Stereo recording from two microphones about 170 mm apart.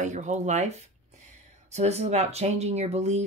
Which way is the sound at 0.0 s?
45° right (ahead or behind).